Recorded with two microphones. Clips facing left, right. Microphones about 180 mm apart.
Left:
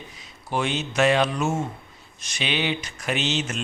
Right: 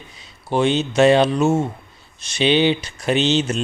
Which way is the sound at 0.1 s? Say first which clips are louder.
Right 7 dB; 30° right (ahead or behind).